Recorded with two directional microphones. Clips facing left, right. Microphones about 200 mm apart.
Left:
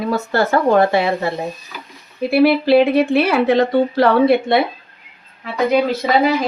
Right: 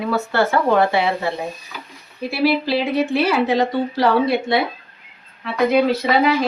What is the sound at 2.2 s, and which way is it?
Speech, 55° left (ahead or behind).